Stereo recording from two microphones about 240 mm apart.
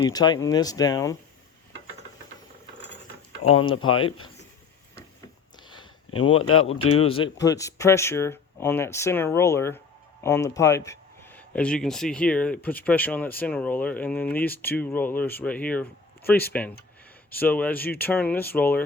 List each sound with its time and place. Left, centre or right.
0.0 s speech: centre
3.8 s speech: left
5.6 s a sound: centre
6.3 s speech: left
7.0 s speech: left